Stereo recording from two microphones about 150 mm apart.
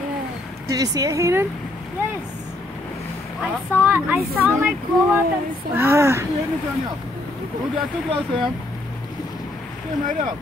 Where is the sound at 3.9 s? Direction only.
15° right (ahead or behind).